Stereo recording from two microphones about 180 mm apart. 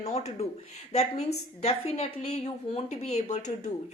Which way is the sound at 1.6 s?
35° left (ahead or behind).